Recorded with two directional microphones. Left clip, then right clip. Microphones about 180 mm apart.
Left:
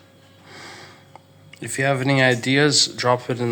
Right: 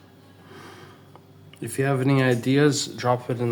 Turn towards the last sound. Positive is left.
turn(degrees=0)  # may be behind; listen again after turning